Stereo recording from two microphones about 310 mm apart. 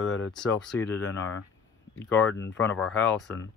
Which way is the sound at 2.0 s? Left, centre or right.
Centre.